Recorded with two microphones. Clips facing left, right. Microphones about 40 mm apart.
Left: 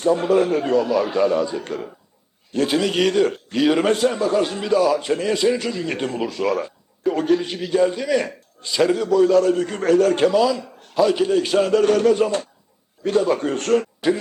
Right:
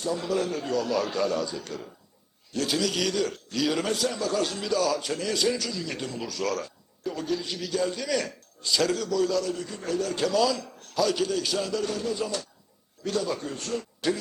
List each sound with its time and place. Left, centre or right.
0.0 s a man's voice: left
0.9 s a man's voice: left
7.0 s a man's voice: left
9.0 s a man's voice: left
10.3 s a man's voice: centre; by 13.8 s left
14.0 s a man's voice: left